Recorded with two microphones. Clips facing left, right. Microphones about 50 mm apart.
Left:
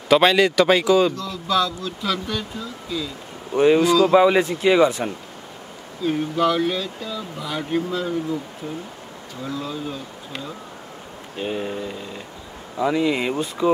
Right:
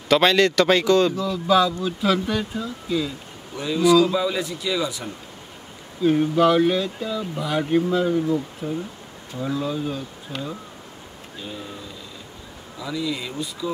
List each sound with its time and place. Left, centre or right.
0.1 s speech: centre
1.1 s speech: centre
3.5 s speech: left
6.0 s speech: centre
8.6 s speech: centre
9.4 s speech: centre
11.3 s speech: left